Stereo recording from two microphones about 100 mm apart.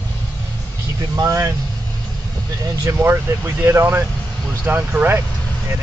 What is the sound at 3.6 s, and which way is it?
Speech, 25° right (ahead or behind).